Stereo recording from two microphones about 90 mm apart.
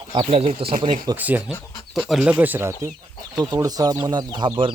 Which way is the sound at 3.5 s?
45° right (ahead or behind).